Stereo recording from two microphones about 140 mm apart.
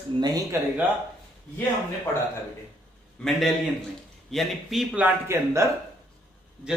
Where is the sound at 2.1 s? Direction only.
15° left (ahead or behind).